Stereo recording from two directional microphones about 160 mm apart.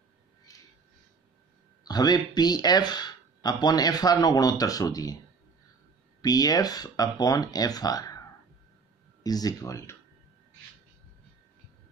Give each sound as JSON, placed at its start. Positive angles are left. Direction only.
{"t": 0.5, "sound": "a sound", "side_deg": 20}
{"t": 1.9, "sound": "speech", "side_deg": 25}
{"t": 6.2, "sound": "speech", "side_deg": 25}
{"t": 9.2, "sound": "speech", "side_deg": 25}